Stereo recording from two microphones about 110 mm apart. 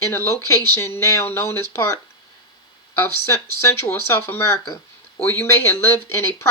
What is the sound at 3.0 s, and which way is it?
Speech, 25° left (ahead or behind).